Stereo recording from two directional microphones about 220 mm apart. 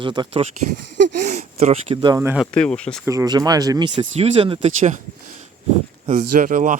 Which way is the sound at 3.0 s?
15° right (ahead or behind).